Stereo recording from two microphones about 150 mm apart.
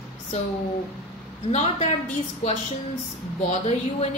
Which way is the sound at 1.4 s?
45° left (ahead or behind).